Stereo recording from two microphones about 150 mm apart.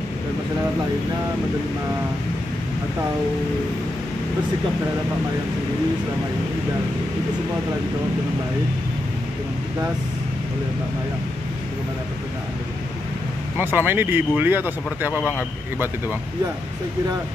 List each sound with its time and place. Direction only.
13.6 s speech: 15° right (ahead or behind)